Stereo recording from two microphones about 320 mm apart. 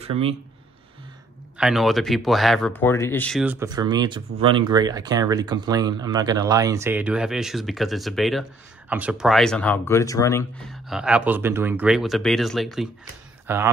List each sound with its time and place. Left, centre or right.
0.0 s speech: centre
1.6 s speech: centre